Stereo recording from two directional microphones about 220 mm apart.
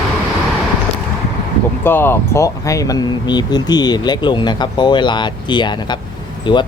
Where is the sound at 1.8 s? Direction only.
10° left (ahead or behind).